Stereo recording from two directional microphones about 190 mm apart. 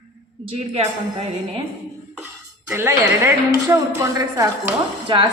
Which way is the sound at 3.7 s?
15° right (ahead or behind).